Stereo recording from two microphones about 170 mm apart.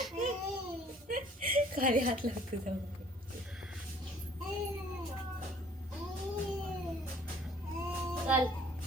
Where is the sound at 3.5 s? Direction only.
Centre (ahead or behind).